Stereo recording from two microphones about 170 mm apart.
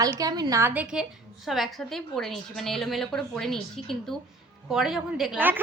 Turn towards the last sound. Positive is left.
turn(degrees=-10)  # may be behind; listen again after turning